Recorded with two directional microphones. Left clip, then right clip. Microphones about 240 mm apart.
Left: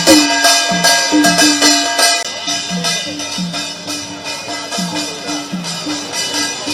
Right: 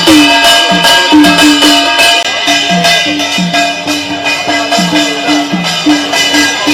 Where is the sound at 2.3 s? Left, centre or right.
Left.